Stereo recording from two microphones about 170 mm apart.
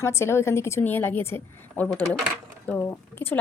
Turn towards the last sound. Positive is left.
turn(degrees=10)  # may be behind; listen again after turning